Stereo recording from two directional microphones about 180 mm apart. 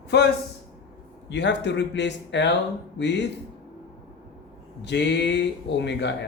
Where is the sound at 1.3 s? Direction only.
75° left (ahead or behind).